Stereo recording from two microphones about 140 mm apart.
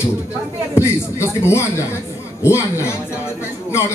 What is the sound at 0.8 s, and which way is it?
Speech, 20° left (ahead or behind).